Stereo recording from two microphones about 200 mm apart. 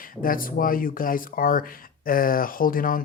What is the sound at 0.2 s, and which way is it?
Speech, 45° left (ahead or behind).